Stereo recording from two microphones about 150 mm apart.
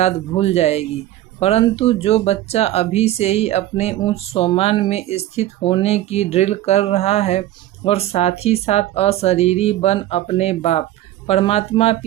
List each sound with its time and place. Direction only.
0.0 s speech: 45° left (ahead or behind)